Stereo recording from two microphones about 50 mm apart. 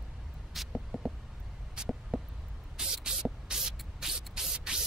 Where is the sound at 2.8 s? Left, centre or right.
Centre.